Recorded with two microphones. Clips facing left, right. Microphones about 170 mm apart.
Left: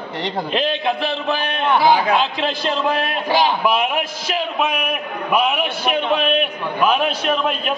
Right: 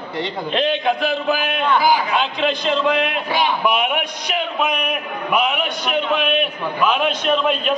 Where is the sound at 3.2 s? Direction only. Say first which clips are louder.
Left 2 dB; 30° left (ahead or behind).